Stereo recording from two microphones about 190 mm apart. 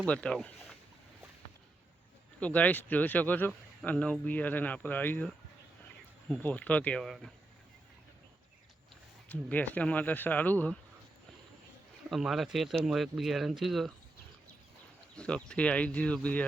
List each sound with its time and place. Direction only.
0.1 s speech: 5° left (ahead or behind)
2.4 s speech: 10° left (ahead or behind)
9.3 s speech: 10° left (ahead or behind)
12.0 s speech: centre (ahead or behind)
15.1 s speech: 5° left (ahead or behind)